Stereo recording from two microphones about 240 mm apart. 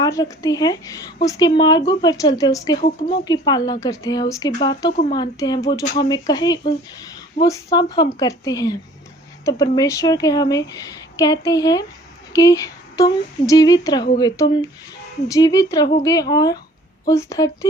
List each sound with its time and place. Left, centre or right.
0.0 s speech: centre